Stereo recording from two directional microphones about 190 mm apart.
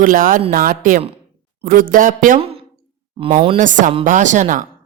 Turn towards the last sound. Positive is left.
turn(degrees=-40)  # may be behind; listen again after turning